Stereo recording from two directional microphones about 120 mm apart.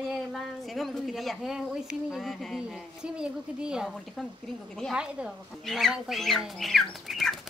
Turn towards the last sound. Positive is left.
turn(degrees=0)  # may be behind; listen again after turning